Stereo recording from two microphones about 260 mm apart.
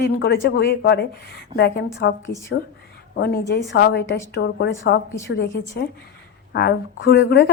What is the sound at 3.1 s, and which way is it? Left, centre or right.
A woman's voice, left.